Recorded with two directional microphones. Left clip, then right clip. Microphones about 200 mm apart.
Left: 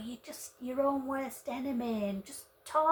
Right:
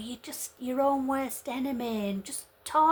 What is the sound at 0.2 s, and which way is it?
Speech, 45° right (ahead or behind).